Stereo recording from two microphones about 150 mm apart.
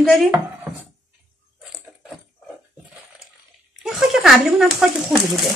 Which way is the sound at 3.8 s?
Centre (ahead or behind).